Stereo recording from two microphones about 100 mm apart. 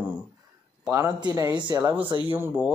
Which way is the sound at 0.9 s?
35° right (ahead or behind).